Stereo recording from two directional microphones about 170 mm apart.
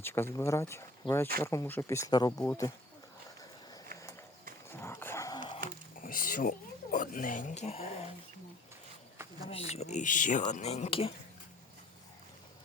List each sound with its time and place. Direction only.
0.0 s speech: 15° left (ahead or behind)
4.7 s dog: 15° left (ahead or behind)
6.0 s speech: 55° left (ahead or behind); by 7.9 s 35° left (ahead or behind)
9.5 s speech: 35° left (ahead or behind)